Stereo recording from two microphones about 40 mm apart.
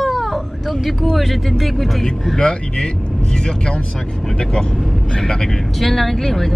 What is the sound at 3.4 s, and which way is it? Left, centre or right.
Speech, centre.